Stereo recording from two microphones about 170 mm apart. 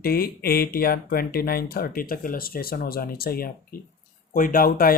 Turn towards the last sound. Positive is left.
turn(degrees=60)  # may be behind; listen again after turning